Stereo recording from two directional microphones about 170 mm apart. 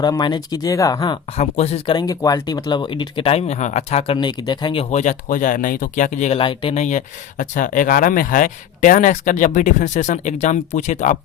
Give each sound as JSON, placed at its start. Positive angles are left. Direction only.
{"t": 0.0, "sound": "speech", "side_deg": 25}
{"t": 1.4, "sound": "speech", "side_deg": 40}
{"t": 2.0, "sound": "speech", "side_deg": 20}
{"t": 6.4, "sound": "speech", "side_deg": 30}